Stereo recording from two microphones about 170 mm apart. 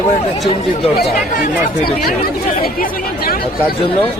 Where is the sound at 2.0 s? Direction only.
60° left (ahead or behind).